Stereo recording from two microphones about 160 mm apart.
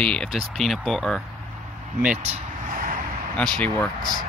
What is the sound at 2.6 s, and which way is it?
Vehicle, 55° right (ahead or behind).